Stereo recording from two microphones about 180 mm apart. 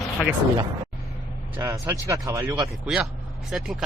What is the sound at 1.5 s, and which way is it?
Speech, 15° right (ahead or behind).